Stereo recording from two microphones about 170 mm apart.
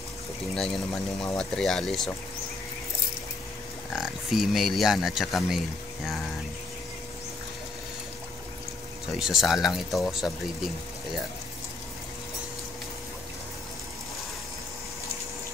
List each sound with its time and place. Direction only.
1.2 s speech: 5° left (ahead or behind)
3.9 s speech: centre (ahead or behind)
9.2 s speech: 5° right (ahead or behind)